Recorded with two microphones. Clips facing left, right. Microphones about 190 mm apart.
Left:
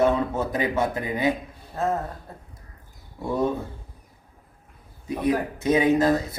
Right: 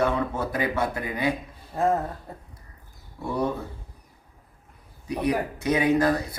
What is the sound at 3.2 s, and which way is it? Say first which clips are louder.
Speech: left 2 dB; 25° left (ahead or behind).